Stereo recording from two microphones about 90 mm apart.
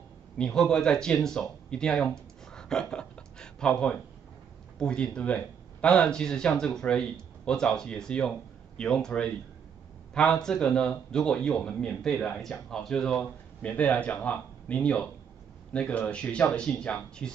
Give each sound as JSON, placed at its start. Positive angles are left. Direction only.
{"t": 0.4, "sound": "speech", "side_deg": 5}